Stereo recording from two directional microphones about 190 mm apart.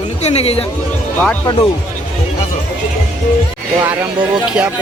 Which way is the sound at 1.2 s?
10° left (ahead or behind).